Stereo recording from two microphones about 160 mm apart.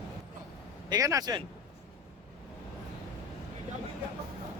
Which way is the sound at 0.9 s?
20° right (ahead or behind).